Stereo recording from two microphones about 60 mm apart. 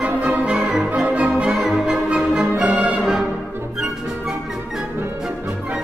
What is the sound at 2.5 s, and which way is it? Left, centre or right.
Music, centre.